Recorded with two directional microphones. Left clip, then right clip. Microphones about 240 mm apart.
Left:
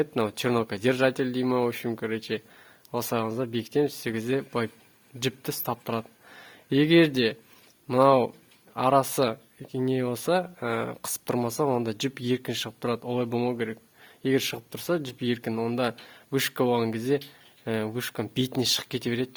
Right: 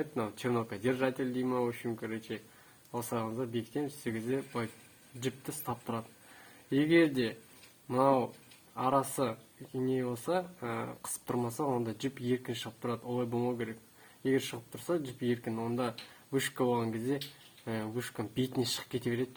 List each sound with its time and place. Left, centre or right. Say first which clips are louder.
0.0 s speech: left 9 dB; left